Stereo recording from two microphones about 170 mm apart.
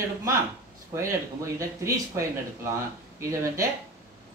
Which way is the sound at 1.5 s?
15° right (ahead or behind).